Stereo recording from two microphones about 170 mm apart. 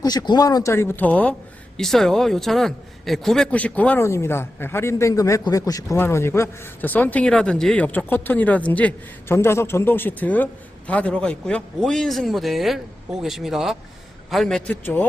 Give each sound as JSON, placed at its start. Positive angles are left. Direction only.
{"t": 0.0, "sound": "a man's voice", "side_deg": 25}